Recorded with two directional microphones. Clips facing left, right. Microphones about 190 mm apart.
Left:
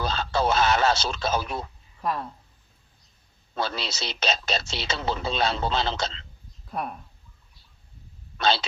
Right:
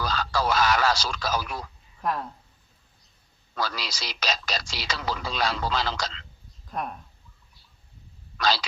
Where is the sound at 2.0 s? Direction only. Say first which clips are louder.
Even; centre (ahead or behind).